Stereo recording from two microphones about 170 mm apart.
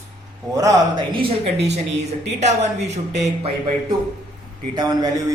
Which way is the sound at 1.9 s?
40° right (ahead or behind).